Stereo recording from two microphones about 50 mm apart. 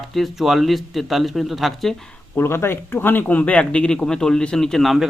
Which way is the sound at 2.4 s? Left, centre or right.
Left.